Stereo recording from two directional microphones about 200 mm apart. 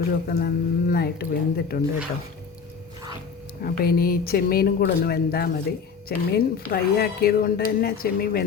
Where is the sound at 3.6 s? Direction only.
50° left (ahead or behind).